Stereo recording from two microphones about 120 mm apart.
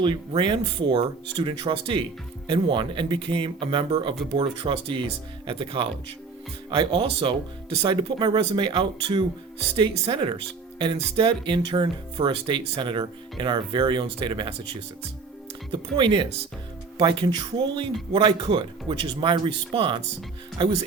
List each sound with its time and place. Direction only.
0.0 s speech: 40° right (ahead or behind)
16.0 s speech: 45° right (ahead or behind)